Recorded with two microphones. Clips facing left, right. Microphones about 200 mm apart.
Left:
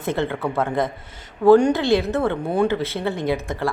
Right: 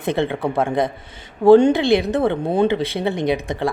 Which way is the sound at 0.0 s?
15° right (ahead or behind).